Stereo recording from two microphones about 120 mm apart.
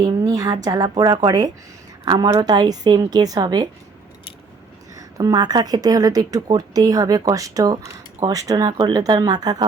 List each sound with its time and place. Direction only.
0.0 s a woman's voice: 30° right (ahead or behind)
4.9 s a woman's voice: 30° right (ahead or behind)